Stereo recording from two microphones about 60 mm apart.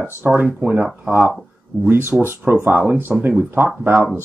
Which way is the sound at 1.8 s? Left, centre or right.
Right.